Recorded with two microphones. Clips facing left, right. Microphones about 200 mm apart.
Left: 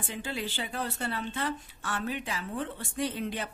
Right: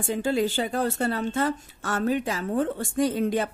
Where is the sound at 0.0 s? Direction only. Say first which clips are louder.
Right 11 dB; 45° right (ahead or behind).